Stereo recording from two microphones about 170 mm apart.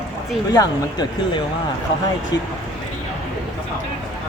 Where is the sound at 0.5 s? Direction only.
25° left (ahead or behind).